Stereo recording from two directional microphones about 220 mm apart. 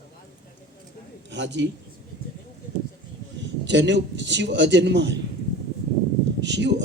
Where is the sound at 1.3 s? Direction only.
55° right (ahead or behind).